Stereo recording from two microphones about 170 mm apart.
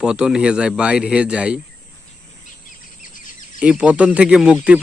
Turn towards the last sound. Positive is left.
turn(degrees=-5)  # may be behind; listen again after turning